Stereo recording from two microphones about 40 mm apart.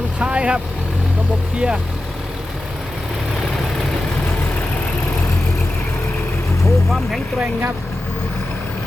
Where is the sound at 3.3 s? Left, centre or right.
Centre.